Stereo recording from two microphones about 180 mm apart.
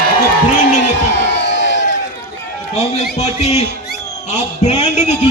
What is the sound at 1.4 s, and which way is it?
Crowd, 75° left (ahead or behind).